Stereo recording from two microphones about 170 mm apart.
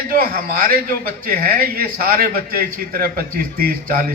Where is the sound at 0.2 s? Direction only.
60° right (ahead or behind).